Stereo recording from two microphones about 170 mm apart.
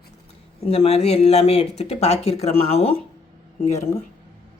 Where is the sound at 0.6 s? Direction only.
35° left (ahead or behind).